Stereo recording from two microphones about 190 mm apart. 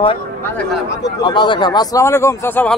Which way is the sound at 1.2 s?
25° left (ahead or behind).